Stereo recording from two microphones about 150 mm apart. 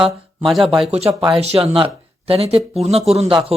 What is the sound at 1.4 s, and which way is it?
Speech, 40° right (ahead or behind).